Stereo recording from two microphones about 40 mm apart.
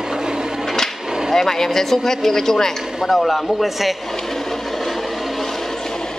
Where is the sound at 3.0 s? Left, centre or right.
Centre.